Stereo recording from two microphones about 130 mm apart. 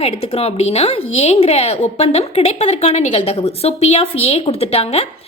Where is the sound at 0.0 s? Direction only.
50° left (ahead or behind).